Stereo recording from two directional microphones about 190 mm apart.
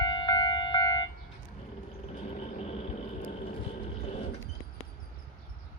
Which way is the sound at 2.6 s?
35° left (ahead or behind).